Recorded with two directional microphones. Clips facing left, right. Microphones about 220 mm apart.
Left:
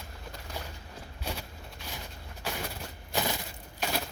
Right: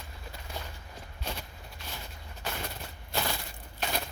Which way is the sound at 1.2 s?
10° left (ahead or behind).